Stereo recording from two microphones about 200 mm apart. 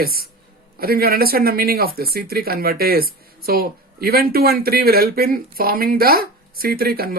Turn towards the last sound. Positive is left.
turn(degrees=-50)  # may be behind; listen again after turning